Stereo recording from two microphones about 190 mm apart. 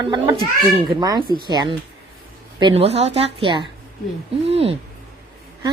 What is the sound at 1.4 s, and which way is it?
A woman's voice, 25° right (ahead or behind).